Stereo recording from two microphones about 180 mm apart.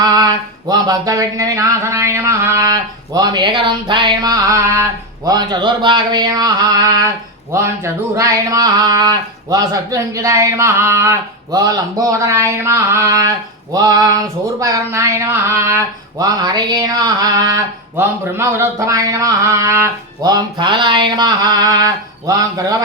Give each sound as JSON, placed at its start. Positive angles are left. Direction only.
{"t": 0.0, "sound": "speech", "side_deg": -20}